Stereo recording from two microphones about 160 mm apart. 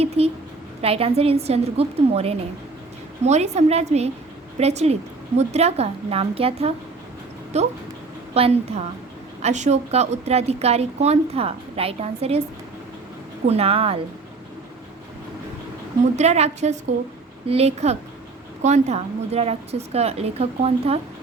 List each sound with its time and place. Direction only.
0.2 s a woman's voice: 40° right (ahead or behind)
13.5 s speech: 40° right (ahead or behind)
16.1 s a woman's voice: 45° right (ahead or behind)